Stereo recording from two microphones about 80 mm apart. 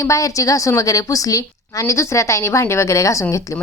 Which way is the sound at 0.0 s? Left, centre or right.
Left.